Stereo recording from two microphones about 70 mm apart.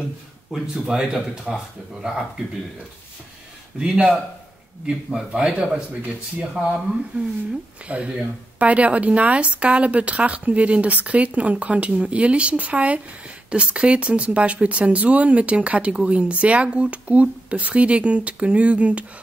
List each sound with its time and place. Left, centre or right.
0.5 s speech: centre
3.8 s speech: centre